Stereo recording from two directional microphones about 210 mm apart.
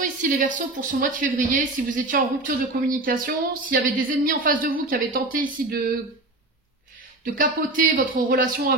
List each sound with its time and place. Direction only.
0.0 s a woman's voice: 40° right (ahead or behind)
7.3 s speech: 40° right (ahead or behind)